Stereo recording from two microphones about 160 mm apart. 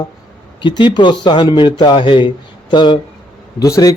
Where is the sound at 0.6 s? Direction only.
30° left (ahead or behind).